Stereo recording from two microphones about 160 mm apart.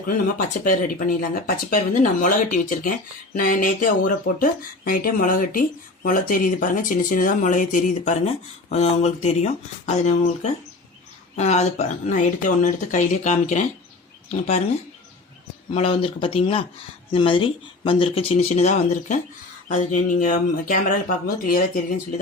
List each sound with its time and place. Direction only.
0.3 s speech: 60° left (ahead or behind)
15.7 s speech: 35° left (ahead or behind); by 21.9 s 65° left (ahead or behind)